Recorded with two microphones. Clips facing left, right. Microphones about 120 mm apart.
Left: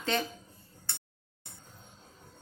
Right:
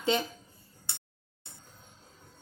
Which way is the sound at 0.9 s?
15° right (ahead or behind).